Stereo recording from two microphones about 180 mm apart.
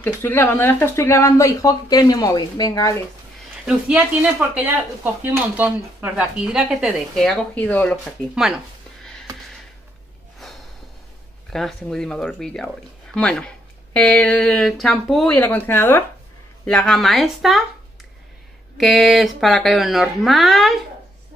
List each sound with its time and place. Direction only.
0.0 s speech: 10° left (ahead or behind)
3.6 s speech: 5° right (ahead or behind)
11.5 s speech: 5° left (ahead or behind)
18.8 s speech: centre (ahead or behind)